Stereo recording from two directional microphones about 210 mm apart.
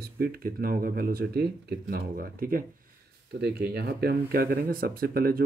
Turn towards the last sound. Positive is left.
turn(degrees=-45)  # may be behind; listen again after turning